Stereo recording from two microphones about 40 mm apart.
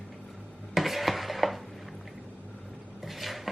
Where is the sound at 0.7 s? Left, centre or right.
Centre.